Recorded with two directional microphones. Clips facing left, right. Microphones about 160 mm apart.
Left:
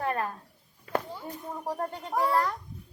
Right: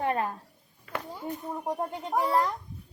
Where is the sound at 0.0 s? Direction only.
20° right (ahead or behind).